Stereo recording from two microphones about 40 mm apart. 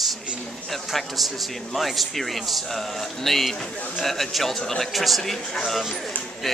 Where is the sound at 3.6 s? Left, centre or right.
Left.